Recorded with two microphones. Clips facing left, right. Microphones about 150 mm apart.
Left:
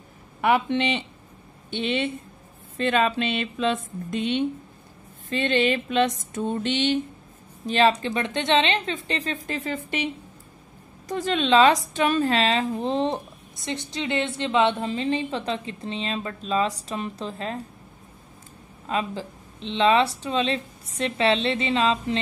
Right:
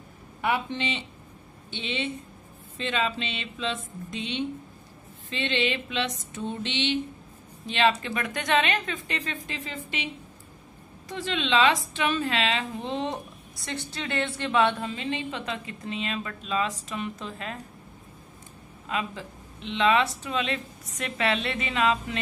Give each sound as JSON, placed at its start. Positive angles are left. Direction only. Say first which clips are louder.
{"t": 0.4, "sound": "a woman's voice", "louder": "left 6 dB", "side_deg": 65}
{"t": 8.0, "sound": "speech", "louder": "left 5 dB", "side_deg": 30}
{"t": 9.5, "sound": "speech", "louder": "left 7 dB", "side_deg": 50}
{"t": 11.1, "sound": "a woman's voice", "louder": "left 6 dB", "side_deg": 45}
{"t": 18.9, "sound": "speech", "louder": "left 4 dB", "side_deg": 35}